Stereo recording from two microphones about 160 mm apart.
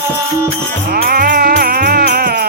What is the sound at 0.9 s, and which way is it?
Music, 70° right (ahead or behind).